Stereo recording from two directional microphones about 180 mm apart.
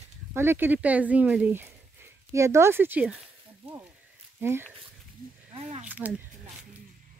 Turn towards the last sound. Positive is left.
turn(degrees=-10)  # may be behind; listen again after turning